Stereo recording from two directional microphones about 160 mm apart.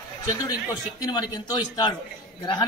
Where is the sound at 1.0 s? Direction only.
25° left (ahead or behind).